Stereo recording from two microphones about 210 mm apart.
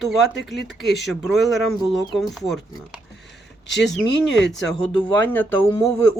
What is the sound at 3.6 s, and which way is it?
Speech, 60° left (ahead or behind).